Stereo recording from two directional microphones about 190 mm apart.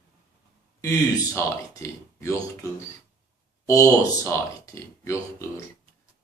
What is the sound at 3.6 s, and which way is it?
A man's voice, 15° left (ahead or behind).